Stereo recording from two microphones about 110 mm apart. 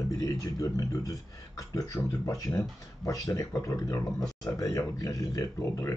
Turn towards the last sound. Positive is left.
turn(degrees=30)  # may be behind; listen again after turning